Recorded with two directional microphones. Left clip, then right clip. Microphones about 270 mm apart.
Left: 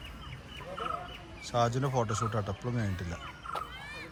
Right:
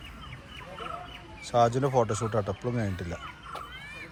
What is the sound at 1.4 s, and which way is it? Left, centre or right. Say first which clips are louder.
Speech: right 6 dB; centre.